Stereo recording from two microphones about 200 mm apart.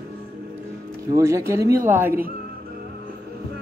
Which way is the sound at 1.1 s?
15° right (ahead or behind).